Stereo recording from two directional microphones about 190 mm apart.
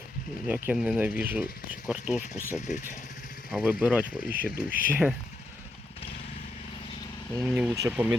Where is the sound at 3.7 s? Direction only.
5° right (ahead or behind).